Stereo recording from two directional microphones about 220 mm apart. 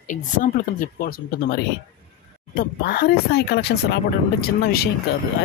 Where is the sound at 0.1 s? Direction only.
35° left (ahead or behind).